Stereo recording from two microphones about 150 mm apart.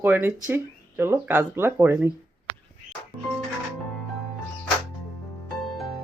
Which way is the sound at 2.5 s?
30° left (ahead or behind).